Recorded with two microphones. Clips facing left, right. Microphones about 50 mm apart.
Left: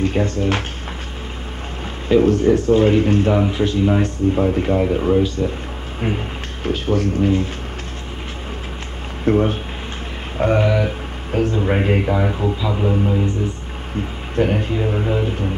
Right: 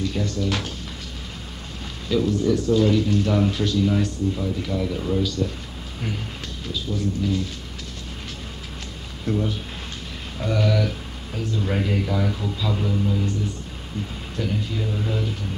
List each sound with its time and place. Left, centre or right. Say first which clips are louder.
0.0 s speech: left 6 dB; left
2.0 s speech: left 7 dB; left
6.7 s speech: left 8 dB; left
9.2 s speech: left 8 dB; left
14.3 s speech: left 9 dB; left